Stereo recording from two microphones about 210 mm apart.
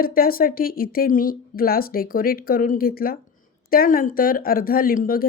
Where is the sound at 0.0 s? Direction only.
45° left (ahead or behind).